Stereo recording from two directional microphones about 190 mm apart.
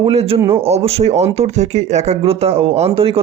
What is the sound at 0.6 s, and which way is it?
A man's voice, 30° right (ahead or behind).